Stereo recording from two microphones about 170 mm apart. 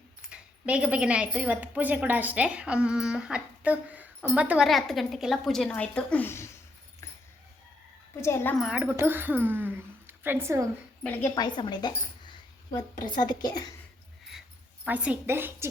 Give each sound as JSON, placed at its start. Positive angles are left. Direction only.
{"t": 0.3, "sound": "a woman's voice", "side_deg": -5}
{"t": 8.2, "sound": "a woman's voice", "side_deg": 15}
{"t": 8.5, "sound": "speech", "side_deg": -5}
{"t": 11.3, "sound": "speech", "side_deg": 25}
{"t": 14.8, "sound": "a woman's voice", "side_deg": -10}